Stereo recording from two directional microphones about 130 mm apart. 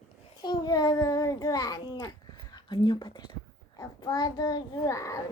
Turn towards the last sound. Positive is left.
turn(degrees=25)  # may be behind; listen again after turning